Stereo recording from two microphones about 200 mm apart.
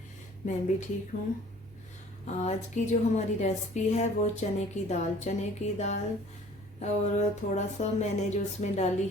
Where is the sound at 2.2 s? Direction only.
35° left (ahead or behind).